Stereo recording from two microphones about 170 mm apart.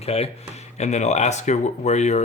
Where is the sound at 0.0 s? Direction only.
35° left (ahead or behind).